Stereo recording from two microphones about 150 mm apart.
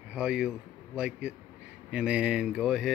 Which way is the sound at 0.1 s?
5° right (ahead or behind).